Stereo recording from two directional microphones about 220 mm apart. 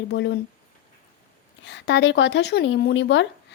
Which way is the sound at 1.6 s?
55° left (ahead or behind).